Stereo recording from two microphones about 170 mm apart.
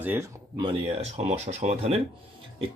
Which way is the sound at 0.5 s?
30° right (ahead or behind).